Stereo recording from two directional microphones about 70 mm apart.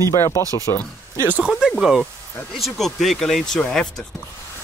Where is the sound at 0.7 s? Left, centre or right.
Left.